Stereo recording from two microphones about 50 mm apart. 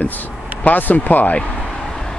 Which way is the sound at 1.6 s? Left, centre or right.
Centre.